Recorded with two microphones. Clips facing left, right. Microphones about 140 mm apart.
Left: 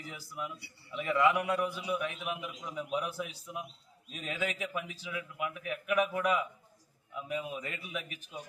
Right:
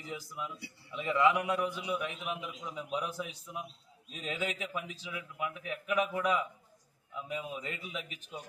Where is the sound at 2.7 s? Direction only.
20° right (ahead or behind).